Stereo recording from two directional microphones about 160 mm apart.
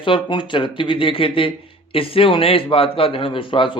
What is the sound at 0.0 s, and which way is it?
Speech, 30° left (ahead or behind).